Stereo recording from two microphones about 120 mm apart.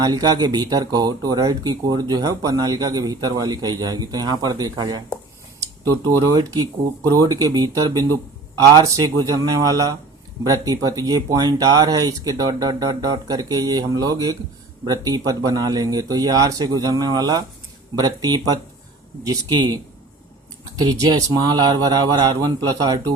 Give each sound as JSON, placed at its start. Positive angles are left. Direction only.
{"t": 0.0, "sound": "speech", "side_deg": -35}